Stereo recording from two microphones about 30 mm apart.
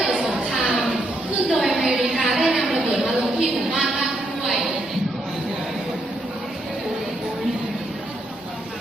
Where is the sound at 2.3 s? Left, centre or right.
Centre.